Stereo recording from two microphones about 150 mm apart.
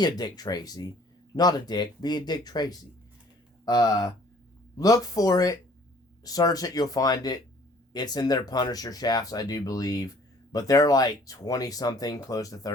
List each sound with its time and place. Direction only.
0.0 s speech: 25° left (ahead or behind)